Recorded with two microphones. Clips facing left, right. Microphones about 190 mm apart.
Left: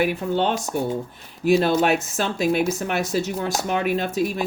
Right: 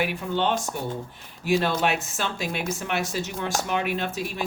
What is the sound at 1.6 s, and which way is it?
Speech, 40° left (ahead or behind).